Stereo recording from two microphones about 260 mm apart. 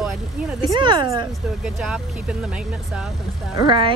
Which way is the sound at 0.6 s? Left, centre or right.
Centre.